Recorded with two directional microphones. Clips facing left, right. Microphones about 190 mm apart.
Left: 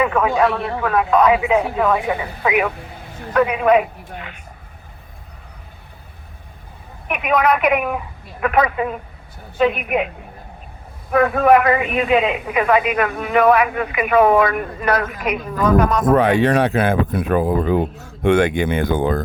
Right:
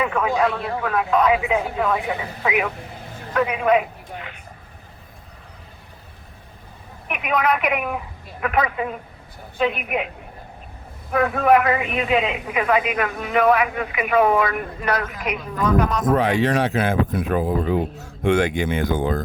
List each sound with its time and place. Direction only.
0.0 s speech: 70° left (ahead or behind)
2.4 s a man's voice: 60° left (ahead or behind)
7.1 s a man's voice: 55° left (ahead or behind)
9.6 s a woman's voice: 50° left (ahead or behind)
11.1 s a man's voice: 55° left (ahead or behind)